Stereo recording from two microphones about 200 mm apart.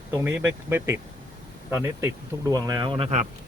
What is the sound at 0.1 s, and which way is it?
Speech, 10° right (ahead or behind).